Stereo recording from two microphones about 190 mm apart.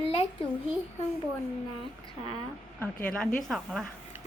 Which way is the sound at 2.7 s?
5° left (ahead or behind).